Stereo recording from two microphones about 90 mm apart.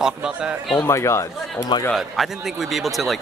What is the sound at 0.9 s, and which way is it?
Speech, 30° left (ahead or behind).